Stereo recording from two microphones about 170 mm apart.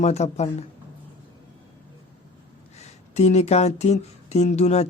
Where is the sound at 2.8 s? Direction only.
40° left (ahead or behind).